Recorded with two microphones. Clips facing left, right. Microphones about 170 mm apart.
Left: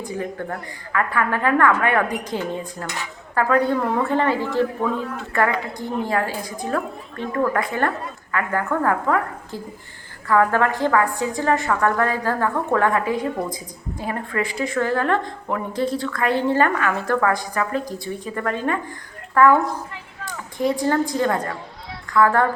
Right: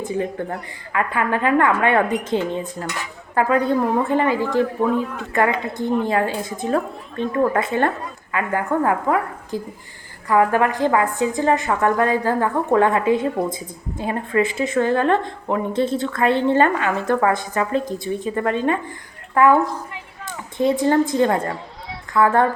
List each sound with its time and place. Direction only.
0.4 s a woman's voice: 20° right (ahead or behind)